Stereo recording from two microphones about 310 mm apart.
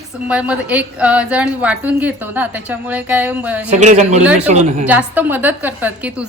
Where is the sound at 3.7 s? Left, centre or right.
Right.